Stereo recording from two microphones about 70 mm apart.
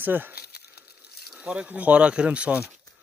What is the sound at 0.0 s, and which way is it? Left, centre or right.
A man's voice, right.